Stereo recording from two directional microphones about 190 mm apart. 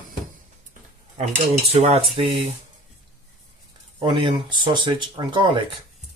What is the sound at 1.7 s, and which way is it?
Speech, 30° right (ahead or behind).